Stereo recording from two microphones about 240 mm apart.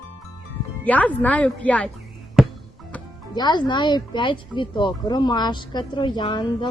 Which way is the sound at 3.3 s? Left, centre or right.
Centre.